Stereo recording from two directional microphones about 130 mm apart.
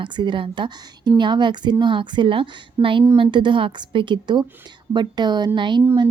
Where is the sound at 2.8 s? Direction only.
20° right (ahead or behind).